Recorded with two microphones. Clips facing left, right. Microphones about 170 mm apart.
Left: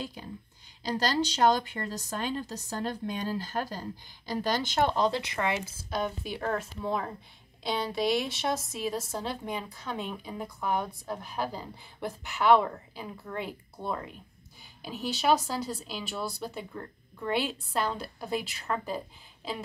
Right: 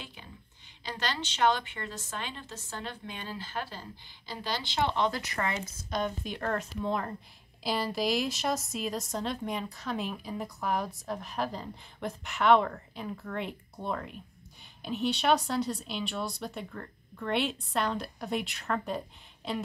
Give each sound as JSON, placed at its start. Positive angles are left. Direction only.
{"t": 0.0, "sound": "a woman's voice", "side_deg": 40}
{"t": 5.3, "sound": "speech", "side_deg": 15}
{"t": 5.9, "sound": "speech", "side_deg": 5}